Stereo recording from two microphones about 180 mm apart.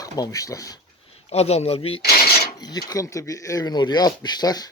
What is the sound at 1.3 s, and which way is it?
Speech, 35° left (ahead or behind).